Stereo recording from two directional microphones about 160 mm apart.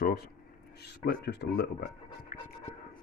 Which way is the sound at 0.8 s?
90° left.